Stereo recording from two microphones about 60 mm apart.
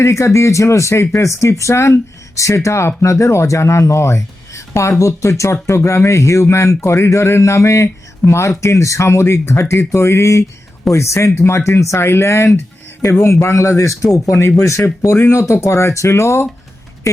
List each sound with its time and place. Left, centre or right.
0.0 s speech: left